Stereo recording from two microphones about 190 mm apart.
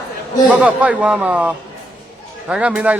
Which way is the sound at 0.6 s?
5° right (ahead or behind).